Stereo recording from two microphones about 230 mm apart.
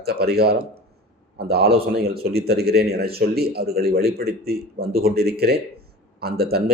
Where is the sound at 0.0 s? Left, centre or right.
Right.